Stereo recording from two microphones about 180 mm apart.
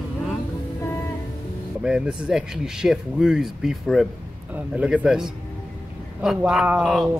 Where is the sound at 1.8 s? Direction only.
5° right (ahead or behind).